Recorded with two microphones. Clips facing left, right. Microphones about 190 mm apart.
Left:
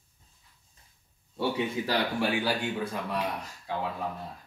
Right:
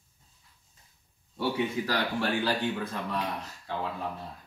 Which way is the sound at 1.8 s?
20° left (ahead or behind).